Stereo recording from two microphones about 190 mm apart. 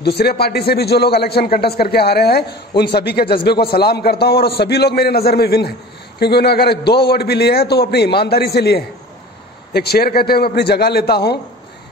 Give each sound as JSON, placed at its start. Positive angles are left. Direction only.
{"t": 0.0, "sound": "a man's voice", "side_deg": 55}